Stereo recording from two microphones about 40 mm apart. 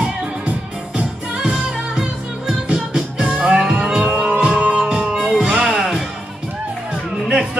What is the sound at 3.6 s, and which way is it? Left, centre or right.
Music, centre.